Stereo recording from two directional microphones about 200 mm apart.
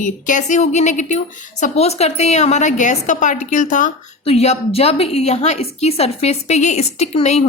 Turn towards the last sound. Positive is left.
turn(degrees=30)  # may be behind; listen again after turning